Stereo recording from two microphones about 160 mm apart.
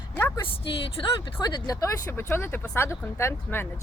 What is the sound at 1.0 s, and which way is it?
Speech, 30° left (ahead or behind).